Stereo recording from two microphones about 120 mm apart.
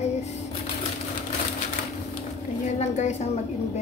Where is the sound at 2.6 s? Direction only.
75° left (ahead or behind).